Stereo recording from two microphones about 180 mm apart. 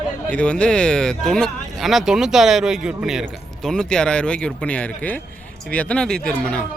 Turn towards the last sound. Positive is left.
turn(degrees=5)  # may be behind; listen again after turning